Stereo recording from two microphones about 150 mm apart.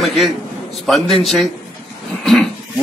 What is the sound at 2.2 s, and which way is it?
Roaring cats, 5° left (ahead or behind).